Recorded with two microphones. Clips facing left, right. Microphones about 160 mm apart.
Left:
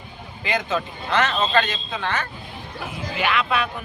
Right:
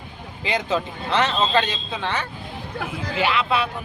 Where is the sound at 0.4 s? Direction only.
30° right (ahead or behind).